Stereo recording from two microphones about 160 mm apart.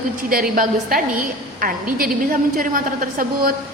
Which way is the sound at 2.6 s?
60° right (ahead or behind).